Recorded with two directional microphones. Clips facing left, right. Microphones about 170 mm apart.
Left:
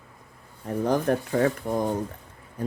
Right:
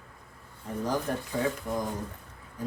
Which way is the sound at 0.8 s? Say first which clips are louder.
Left 7 dB; 60° left (ahead or behind).